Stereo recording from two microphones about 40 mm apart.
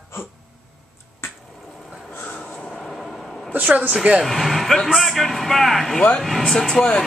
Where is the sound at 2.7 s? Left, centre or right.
Centre.